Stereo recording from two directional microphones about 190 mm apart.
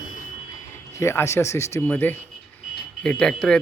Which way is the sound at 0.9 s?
15° left (ahead or behind).